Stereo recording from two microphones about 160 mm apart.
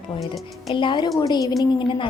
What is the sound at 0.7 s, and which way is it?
A woman's voice, 30° left (ahead or behind).